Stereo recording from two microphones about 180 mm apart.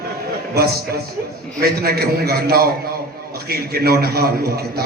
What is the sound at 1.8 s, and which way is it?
A man's voice, 60° right (ahead or behind).